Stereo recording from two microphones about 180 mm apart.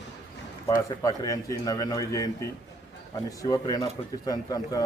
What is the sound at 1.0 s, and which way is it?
A man's voice, 20° left (ahead or behind).